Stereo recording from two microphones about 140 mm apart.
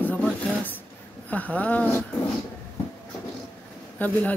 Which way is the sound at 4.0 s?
10° left (ahead or behind).